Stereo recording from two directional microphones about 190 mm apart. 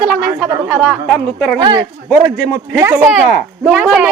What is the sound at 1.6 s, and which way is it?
Speech, 20° right (ahead or behind).